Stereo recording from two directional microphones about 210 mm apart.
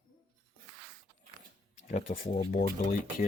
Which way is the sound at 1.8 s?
35° left (ahead or behind).